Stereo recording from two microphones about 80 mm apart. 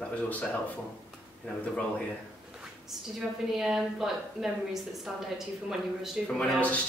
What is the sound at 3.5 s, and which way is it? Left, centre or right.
A woman's voice, centre.